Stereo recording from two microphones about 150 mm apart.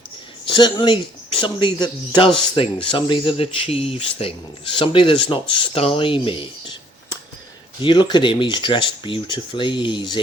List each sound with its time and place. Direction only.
0.4 s speech: 30° left (ahead or behind)
7.8 s speech: 30° left (ahead or behind)